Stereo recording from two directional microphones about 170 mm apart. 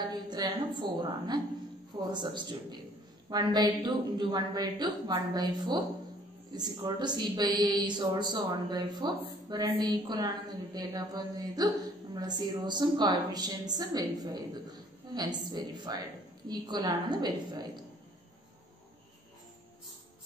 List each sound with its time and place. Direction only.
0.3 s a woman's voice: 25° right (ahead or behind)